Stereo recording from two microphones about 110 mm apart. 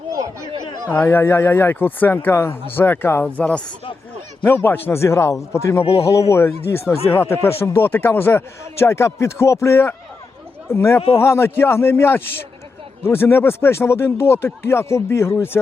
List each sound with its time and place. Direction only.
0.9 s speech: 20° left (ahead or behind)
5.8 s a man's voice: 65° left (ahead or behind)
6.1 s speech: 25° left (ahead or behind)